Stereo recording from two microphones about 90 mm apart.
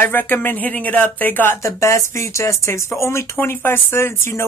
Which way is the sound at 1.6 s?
35° left (ahead or behind).